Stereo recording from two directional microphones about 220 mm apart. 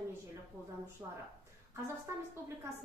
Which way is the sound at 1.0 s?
10° right (ahead or behind).